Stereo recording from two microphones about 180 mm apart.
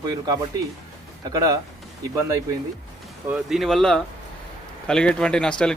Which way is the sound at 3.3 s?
Centre (ahead or behind).